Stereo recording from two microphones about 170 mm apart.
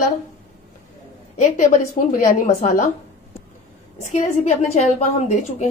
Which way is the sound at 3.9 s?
40° left (ahead or behind).